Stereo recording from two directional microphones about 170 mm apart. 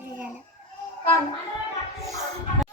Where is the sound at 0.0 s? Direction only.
10° right (ahead or behind).